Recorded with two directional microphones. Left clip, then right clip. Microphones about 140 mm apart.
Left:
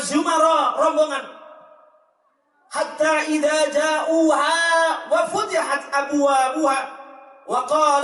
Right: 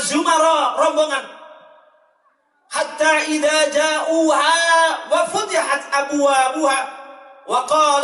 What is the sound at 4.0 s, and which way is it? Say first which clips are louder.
Speech: right 1 dB; 35° left (ahead or behind).